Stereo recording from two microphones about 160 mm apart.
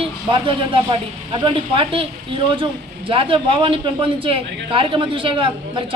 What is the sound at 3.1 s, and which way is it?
Speech, 35° right (ahead or behind).